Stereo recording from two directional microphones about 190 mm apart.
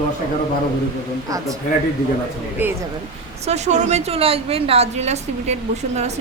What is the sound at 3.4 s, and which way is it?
A woman's voice, 35° right (ahead or behind).